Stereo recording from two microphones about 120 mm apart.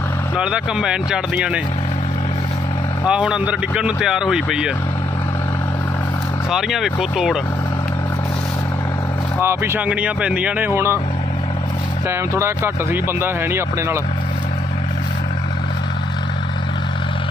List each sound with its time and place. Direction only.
0.3 s speech: 5° right (ahead or behind)
3.1 s speech: 10° right (ahead or behind)
6.5 s speech: 5° right (ahead or behind)
9.4 s speech: 20° right (ahead or behind)
12.0 s speech: 20° right (ahead or behind)